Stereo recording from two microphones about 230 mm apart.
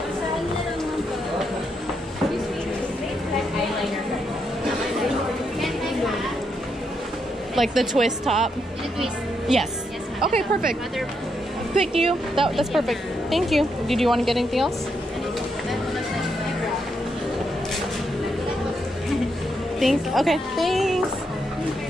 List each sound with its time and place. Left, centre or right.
7.5 s a woman's voice: centre
10.3 s speech: right
11.9 s speech: right
12.4 s a woman's voice: centre
19.8 s a woman's voice: centre